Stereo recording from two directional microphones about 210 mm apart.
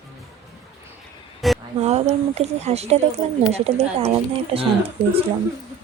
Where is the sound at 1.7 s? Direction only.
30° right (ahead or behind).